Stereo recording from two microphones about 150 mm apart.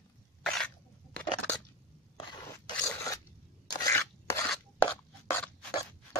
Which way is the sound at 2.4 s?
20° left (ahead or behind).